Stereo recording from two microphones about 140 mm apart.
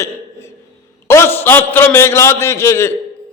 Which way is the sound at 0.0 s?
20° left (ahead or behind).